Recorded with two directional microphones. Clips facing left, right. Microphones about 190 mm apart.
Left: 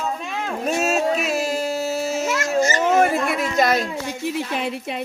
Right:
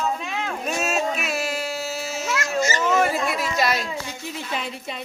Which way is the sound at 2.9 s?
55° left (ahead or behind).